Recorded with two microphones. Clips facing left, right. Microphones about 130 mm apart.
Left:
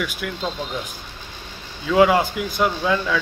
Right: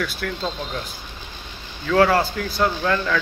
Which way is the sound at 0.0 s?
10° left (ahead or behind).